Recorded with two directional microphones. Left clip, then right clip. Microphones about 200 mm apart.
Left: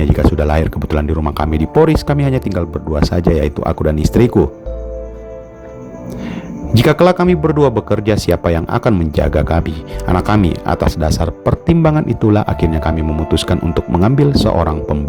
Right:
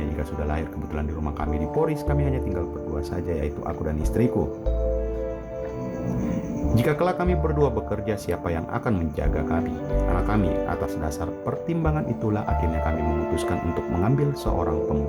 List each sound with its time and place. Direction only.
0.2 s speech: 50° left (ahead or behind)
6.7 s speech: 45° left (ahead or behind)